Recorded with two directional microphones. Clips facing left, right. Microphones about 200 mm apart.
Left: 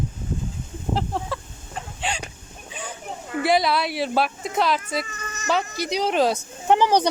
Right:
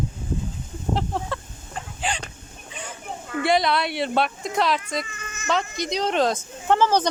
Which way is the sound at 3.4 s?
5° left (ahead or behind).